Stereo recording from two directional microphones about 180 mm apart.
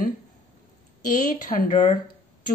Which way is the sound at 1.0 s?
45° left (ahead or behind).